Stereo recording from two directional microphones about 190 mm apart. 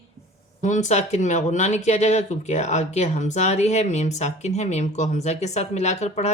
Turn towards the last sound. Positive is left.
turn(degrees=35)  # may be behind; listen again after turning